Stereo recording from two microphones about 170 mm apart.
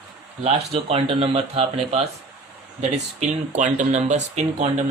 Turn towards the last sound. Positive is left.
turn(degrees=-40)  # may be behind; listen again after turning